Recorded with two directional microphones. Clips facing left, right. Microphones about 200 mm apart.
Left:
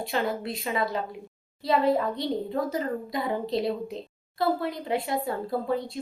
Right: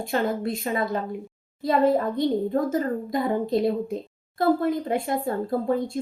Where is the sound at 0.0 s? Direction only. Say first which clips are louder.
Right 3 dB; 45° right (ahead or behind).